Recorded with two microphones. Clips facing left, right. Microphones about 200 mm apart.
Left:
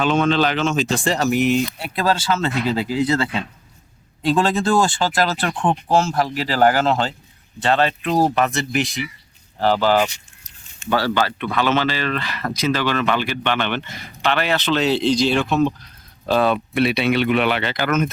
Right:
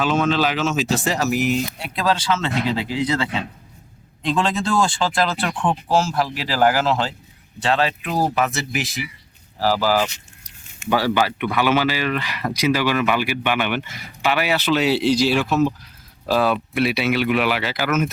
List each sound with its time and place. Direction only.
0.0 s speech: 5° right (ahead or behind)
2.4 s speech: 45° left (ahead or behind)
4.2 s speech: 5° left (ahead or behind)